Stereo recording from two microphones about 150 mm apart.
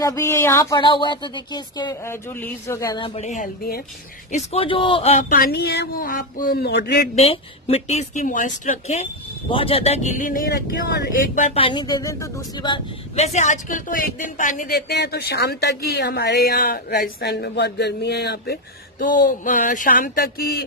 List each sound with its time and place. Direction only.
0.0 s speech: 20° left (ahead or behind)
0.7 s a woman's voice: 35° left (ahead or behind)
2.0 s speech: 15° left (ahead or behind)
3.0 s a woman's voice: 50° left (ahead or behind)
5.3 s speech: 85° left
7.2 s a woman's voice: 40° left (ahead or behind); by 11.4 s 90° left
11.4 s speech: 40° left (ahead or behind); by 12.7 s 20° left (ahead or behind)
12.7 s speech: 45° left (ahead or behind); by 20.6 s 90° left